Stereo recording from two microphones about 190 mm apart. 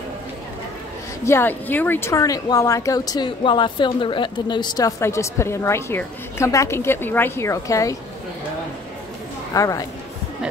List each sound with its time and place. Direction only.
1.2 s speech: 10° left (ahead or behind)
9.5 s speech: 20° left (ahead or behind)